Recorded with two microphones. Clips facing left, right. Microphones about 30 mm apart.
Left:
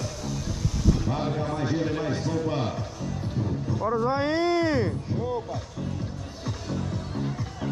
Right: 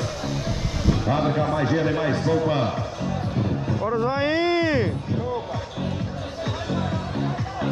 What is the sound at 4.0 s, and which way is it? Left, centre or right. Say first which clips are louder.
Speech: right 3 dB; right.